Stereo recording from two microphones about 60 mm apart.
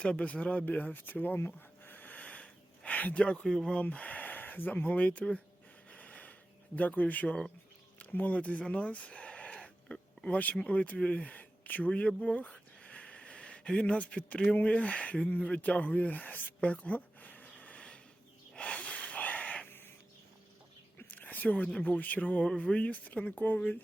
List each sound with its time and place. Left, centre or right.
0.0 s speech: centre
1.5 s a sound: left
3.4 s speech: centre
3.8 s speech: left
5.9 s a sound: left
6.7 s speech: left
15.5 s a sound: left
18.5 s snort: left
21.0 s whispering: left
21.8 s speech: left